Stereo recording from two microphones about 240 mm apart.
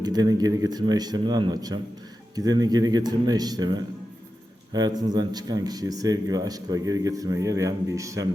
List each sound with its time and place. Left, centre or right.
0.0 s speech: centre